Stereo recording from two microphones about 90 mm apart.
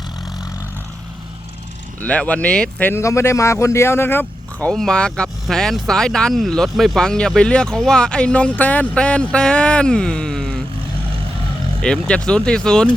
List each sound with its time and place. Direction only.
2.0 s speech: 15° left (ahead or behind)
2.9 s a man's voice: 30° left (ahead or behind)
4.7 s speech: 5° left (ahead or behind)
11.8 s speech: 10° left (ahead or behind)